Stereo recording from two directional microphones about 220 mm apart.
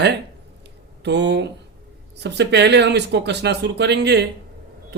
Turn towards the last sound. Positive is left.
turn(degrees=-50)  # may be behind; listen again after turning